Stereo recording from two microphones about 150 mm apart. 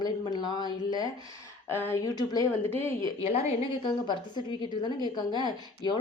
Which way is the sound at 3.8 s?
30° left (ahead or behind).